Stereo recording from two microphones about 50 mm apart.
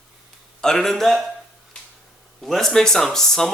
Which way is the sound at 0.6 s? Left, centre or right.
Centre.